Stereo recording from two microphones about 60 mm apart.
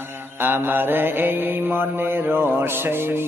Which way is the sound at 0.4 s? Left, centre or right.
Right.